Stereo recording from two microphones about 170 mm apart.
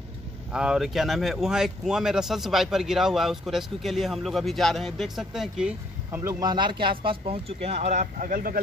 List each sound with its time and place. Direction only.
0.5 s speech: 5° right (ahead or behind)
6.2 s speech: 25° right (ahead or behind); by 8.5 s 60° right (ahead or behind)